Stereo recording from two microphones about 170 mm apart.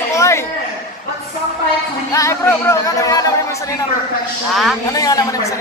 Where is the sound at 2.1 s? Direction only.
15° left (ahead or behind).